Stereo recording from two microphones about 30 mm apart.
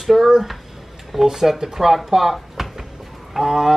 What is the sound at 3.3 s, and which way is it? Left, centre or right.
Speech, centre.